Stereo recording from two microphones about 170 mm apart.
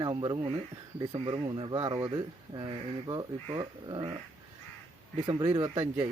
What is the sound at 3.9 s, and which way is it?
Speech, 25° right (ahead or behind).